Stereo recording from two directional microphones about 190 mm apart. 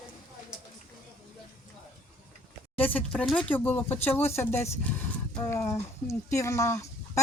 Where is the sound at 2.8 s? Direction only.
10° left (ahead or behind).